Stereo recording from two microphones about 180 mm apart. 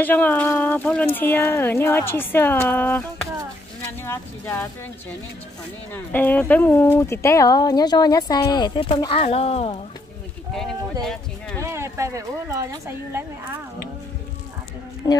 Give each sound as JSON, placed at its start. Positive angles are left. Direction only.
{"t": 0.0, "sound": "speech", "side_deg": 10}
{"t": 5.9, "sound": "speech", "side_deg": 10}
{"t": 10.5, "sound": "speech", "side_deg": 5}
{"t": 11.6, "sound": "a woman's voice", "side_deg": -15}